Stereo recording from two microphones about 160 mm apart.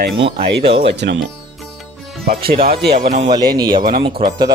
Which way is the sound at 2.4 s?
70° right (ahead or behind).